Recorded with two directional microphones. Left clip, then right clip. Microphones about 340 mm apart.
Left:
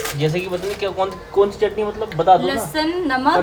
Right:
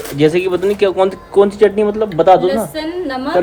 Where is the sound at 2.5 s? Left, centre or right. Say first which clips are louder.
Right 2 dB; centre.